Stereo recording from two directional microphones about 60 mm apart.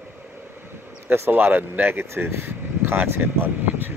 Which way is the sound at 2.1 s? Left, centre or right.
Right.